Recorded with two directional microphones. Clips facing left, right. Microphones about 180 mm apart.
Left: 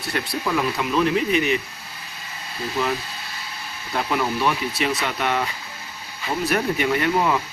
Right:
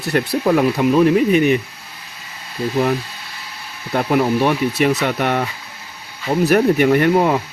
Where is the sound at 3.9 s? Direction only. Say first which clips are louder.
Right 7 dB; 50° right (ahead or behind).